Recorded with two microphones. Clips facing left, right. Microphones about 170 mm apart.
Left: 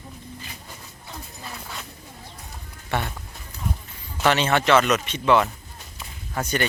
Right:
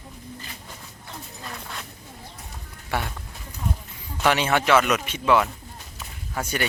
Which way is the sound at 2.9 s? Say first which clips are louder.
Left 1 dB; 5° right (ahead or behind).